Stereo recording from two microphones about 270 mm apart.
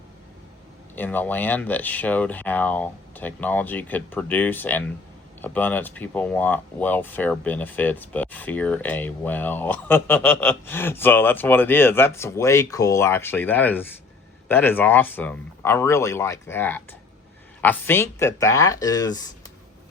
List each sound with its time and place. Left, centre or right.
0.9 s speech: centre